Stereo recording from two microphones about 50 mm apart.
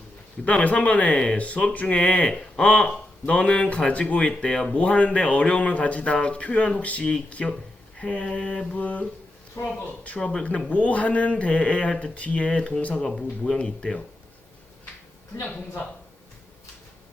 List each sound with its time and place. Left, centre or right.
0.4 s a man's voice: left
10.2 s speech: centre
10.4 s a man's voice: left